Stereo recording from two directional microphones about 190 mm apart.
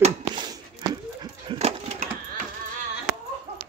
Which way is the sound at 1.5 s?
35° right (ahead or behind).